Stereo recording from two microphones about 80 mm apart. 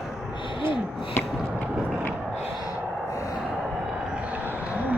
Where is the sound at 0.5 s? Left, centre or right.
Left.